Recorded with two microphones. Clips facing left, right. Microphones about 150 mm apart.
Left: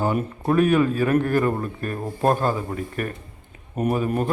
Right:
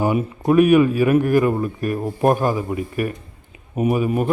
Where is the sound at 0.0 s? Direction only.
10° right (ahead or behind).